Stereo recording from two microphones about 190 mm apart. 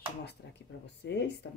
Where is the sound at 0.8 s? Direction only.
65° left (ahead or behind).